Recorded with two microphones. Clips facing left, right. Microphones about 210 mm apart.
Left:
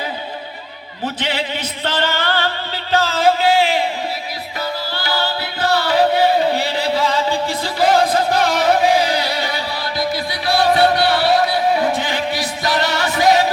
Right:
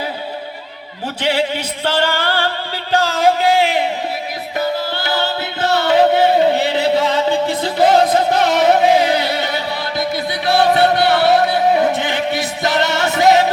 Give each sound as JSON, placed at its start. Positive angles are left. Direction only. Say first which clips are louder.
{"t": 1.2, "sound": "music", "louder": "right 8 dB", "side_deg": -10}
{"t": 4.5, "sound": "music", "louder": "right 6 dB", "side_deg": -20}